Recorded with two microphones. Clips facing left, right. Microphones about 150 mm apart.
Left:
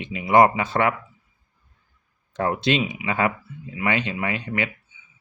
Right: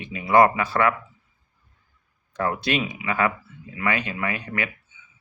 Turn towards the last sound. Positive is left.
turn(degrees=25)  # may be behind; listen again after turning